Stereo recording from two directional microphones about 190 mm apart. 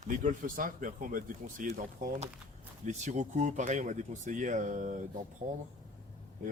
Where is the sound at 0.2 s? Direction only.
45° right (ahead or behind).